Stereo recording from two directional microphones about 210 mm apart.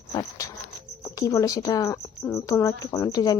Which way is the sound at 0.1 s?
15° left (ahead or behind).